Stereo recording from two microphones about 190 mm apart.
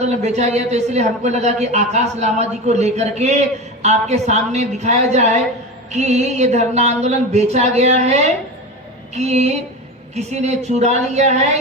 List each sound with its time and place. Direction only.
0.0 s speech: 35° right (ahead or behind)